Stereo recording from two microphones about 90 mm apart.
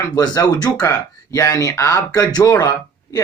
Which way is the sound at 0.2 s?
45° left (ahead or behind).